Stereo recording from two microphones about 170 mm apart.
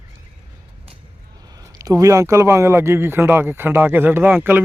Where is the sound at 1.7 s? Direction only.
20° right (ahead or behind).